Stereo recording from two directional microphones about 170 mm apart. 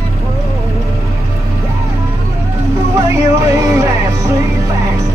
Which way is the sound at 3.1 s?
15° right (ahead or behind).